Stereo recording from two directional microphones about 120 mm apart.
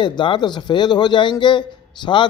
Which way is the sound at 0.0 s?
40° left (ahead or behind).